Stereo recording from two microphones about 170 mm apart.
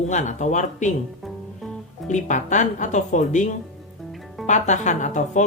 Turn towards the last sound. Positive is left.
turn(degrees=45)  # may be behind; listen again after turning